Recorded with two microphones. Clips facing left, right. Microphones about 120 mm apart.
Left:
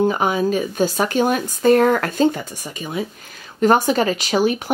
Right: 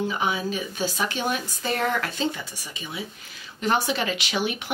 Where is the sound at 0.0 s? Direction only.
45° left (ahead or behind).